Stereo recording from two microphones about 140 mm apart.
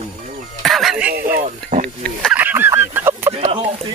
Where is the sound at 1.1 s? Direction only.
90° right.